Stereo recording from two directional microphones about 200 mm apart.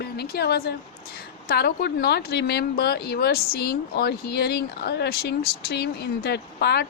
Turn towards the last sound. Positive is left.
turn(degrees=55)  # may be behind; listen again after turning